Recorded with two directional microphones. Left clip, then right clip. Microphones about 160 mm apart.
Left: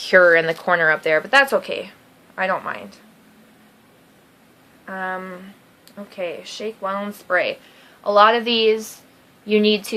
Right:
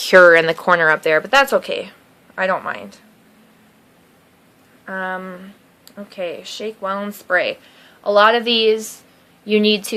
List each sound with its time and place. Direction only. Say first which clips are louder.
0.0 s speech: right 4 dB; 35° right (ahead or behind)
4.9 s a woman's voice: right 2 dB; 30° right (ahead or behind)